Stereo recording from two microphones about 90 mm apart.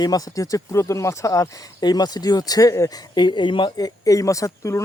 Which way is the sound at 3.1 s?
55° left (ahead or behind).